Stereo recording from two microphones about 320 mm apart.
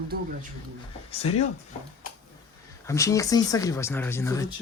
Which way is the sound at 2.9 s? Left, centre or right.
Centre.